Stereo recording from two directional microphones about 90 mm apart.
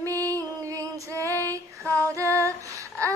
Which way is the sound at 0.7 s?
35° right (ahead or behind).